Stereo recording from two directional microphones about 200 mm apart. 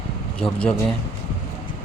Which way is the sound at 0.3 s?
5° left (ahead or behind).